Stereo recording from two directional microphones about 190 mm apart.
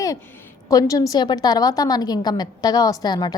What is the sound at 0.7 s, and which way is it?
A woman's voice, 20° left (ahead or behind).